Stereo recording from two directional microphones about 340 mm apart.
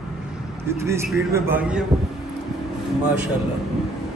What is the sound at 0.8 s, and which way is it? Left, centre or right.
Speech, centre.